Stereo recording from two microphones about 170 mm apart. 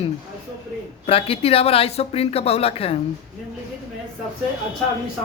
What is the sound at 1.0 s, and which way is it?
Speech, 35° left (ahead or behind).